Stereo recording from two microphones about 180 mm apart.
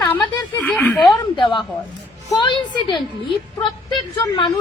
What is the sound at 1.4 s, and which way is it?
A woman's voice, 25° left (ahead or behind).